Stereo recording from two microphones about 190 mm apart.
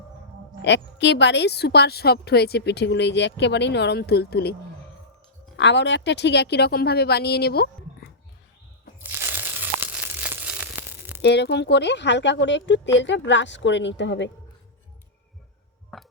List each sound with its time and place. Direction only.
0.6 s speech: 65° left (ahead or behind)
5.5 s speech: 70° left (ahead or behind)
9.0 s a sound: 10° right (ahead or behind)
11.2 s speech: 60° left (ahead or behind)
15.9 s tick-tock: centre (ahead or behind)